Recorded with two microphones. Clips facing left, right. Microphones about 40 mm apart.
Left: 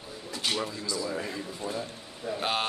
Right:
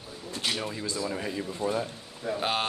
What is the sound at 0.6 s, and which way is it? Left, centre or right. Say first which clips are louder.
Speech: even; right.